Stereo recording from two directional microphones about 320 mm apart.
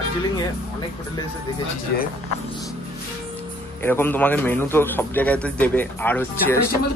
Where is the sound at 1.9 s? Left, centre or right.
Left.